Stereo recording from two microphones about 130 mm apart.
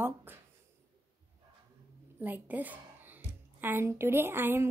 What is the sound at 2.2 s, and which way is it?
A woman's voice, 15° right (ahead or behind).